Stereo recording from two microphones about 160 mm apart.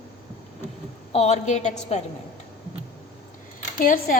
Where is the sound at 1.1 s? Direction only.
45° left (ahead or behind).